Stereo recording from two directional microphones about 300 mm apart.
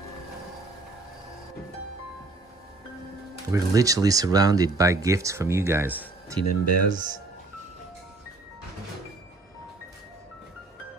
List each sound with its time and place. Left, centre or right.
3.4 s speech: centre
6.5 s speech: right